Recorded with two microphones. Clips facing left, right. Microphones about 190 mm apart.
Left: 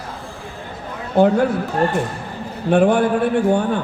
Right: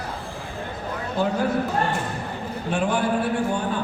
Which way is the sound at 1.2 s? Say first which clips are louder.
Left 10 dB; 65° left (ahead or behind).